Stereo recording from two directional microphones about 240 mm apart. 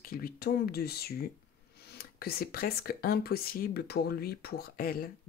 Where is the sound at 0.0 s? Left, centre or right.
Left.